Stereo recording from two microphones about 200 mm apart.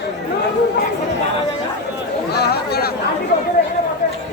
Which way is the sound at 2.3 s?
55° left (ahead or behind).